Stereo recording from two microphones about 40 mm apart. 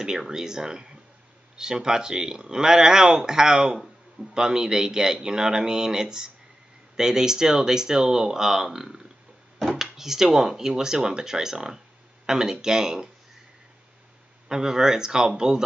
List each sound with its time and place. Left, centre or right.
0.3 s speech: centre
14.5 s speech: centre